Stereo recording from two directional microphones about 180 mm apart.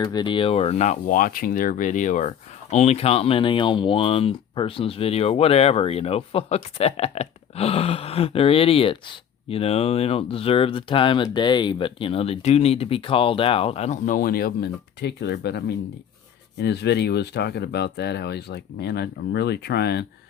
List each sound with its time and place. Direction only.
0.0 s speech: 25° left (ahead or behind); by 20.1 s 65° left (ahead or behind)